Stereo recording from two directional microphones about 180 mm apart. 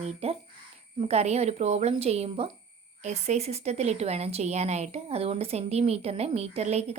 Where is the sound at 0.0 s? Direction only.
35° right (ahead or behind).